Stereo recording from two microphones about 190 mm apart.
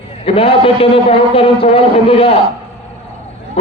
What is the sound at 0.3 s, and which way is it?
A man's voice, 30° left (ahead or behind).